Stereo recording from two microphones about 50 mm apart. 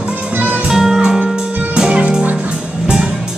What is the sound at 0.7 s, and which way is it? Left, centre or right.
Music, centre.